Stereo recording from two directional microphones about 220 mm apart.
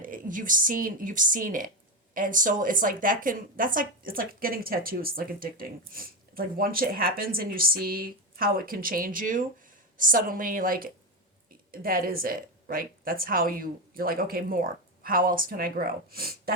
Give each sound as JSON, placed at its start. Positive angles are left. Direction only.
{"t": 0.0, "sound": "a woman's voice", "side_deg": -40}